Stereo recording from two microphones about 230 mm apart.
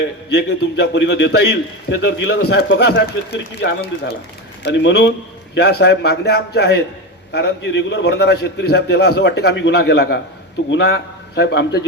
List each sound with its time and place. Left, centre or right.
0.3 s a man's voice: left